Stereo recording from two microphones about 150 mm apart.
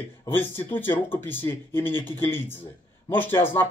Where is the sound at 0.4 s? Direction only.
15° left (ahead or behind).